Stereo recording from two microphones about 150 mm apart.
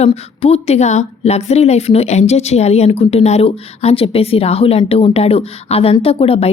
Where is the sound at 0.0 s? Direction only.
45° left (ahead or behind).